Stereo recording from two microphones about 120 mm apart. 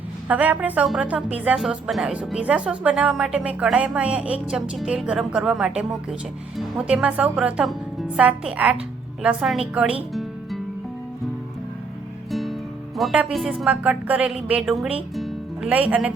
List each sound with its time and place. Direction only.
0.3 s speech: 15° right (ahead or behind)
1.5 s speech: centre (ahead or behind)
10.1 s music: centre (ahead or behind)
12.3 s music: centre (ahead or behind)
13.1 s speech: 5° right (ahead or behind)
15.1 s music: centre (ahead or behind)
15.9 s speech: 10° right (ahead or behind)